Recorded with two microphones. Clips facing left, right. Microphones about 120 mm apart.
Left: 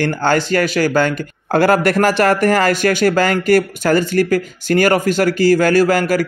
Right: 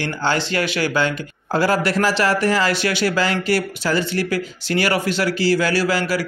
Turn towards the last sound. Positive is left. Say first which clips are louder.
# left 6 dB
turn(degrees=50)  # may be behind; listen again after turning